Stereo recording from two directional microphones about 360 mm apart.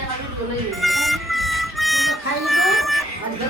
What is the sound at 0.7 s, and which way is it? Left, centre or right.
Harmonica, centre.